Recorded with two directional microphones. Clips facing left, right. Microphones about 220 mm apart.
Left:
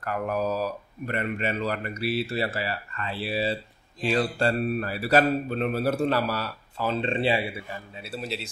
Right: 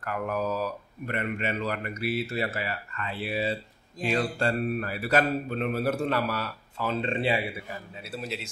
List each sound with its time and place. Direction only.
0.0 s a man's voice: 35° left (ahead or behind)